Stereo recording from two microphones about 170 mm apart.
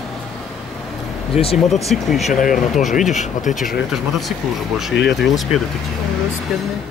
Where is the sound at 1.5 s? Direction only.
Centre (ahead or behind).